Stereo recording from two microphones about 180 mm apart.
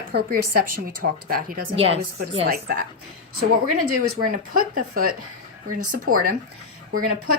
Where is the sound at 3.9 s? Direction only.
50° right (ahead or behind).